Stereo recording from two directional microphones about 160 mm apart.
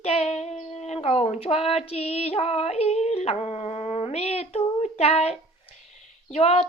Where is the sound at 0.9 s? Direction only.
40° left (ahead or behind).